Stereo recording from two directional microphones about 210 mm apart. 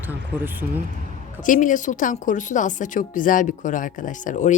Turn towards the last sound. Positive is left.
turn(degrees=35)  # may be behind; listen again after turning